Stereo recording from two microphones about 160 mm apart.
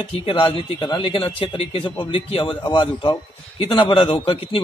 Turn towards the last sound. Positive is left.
turn(degrees=35)  # may be behind; listen again after turning